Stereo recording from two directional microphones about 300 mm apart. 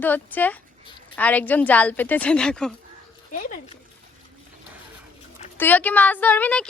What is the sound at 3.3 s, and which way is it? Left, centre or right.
Speech, left.